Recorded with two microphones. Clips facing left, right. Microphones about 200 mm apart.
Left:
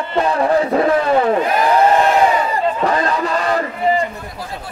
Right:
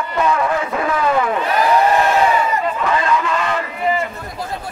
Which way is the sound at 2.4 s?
35° left (ahead or behind).